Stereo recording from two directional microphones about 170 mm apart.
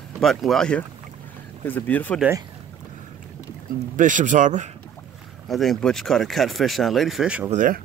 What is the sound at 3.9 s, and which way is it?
Speech, 50° right (ahead or behind).